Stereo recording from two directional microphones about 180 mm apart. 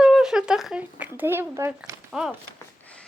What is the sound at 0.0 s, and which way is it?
Speech, 5° right (ahead or behind).